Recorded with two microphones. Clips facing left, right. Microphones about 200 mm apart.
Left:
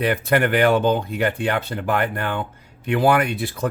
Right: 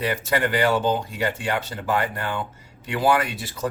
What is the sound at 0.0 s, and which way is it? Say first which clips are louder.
Speech: left 4 dB; 60° left (ahead or behind).